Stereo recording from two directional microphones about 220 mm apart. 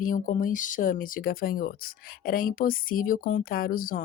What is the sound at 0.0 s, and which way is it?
Speech, 35° left (ahead or behind).